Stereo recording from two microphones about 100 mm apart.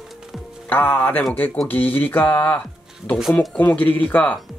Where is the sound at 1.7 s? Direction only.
20° left (ahead or behind).